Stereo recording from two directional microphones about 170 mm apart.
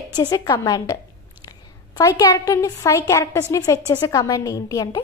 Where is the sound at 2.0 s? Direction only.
20° left (ahead or behind).